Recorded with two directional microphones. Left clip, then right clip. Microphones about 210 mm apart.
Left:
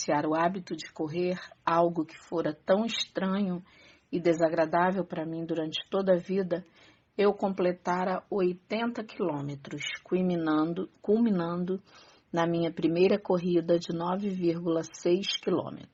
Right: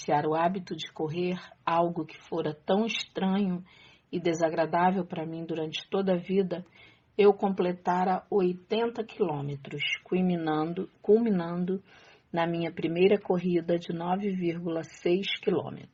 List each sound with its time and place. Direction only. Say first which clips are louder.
0.0 s speech: right 1 dB; 25° left (ahead or behind)